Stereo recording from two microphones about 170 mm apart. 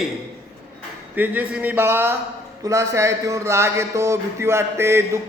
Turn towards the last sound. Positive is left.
turn(degrees=-15)  # may be behind; listen again after turning